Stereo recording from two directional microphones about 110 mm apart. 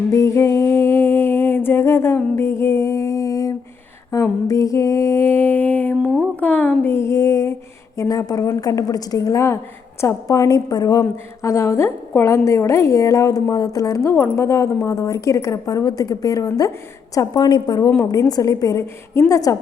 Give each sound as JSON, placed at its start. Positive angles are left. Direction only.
{"t": 0.1, "sound": "humming", "side_deg": 25}
{"t": 4.1, "sound": "mantra", "side_deg": 30}
{"t": 6.4, "sound": "a woman's voice", "side_deg": 15}